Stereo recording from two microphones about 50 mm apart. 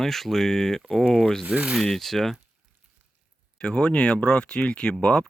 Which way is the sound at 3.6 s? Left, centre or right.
Centre.